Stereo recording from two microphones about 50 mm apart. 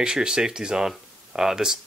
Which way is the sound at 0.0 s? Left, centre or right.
Centre.